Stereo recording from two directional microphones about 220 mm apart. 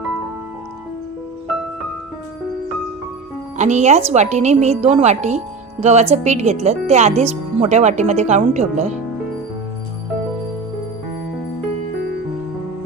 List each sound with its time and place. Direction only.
3.6 s speech: 30° right (ahead or behind)